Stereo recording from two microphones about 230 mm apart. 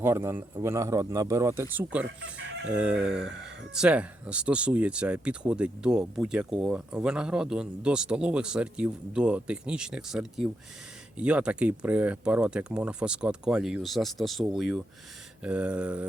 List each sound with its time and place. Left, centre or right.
0.0 s a man's voice: centre
2.4 s chicken: right
2.7 s speech: centre